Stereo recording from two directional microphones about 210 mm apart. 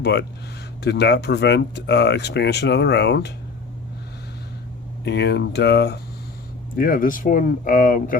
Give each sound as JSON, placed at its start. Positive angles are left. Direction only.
{"t": 0.0, "sound": "speech", "side_deg": 55}
{"t": 5.0, "sound": "speech", "side_deg": 55}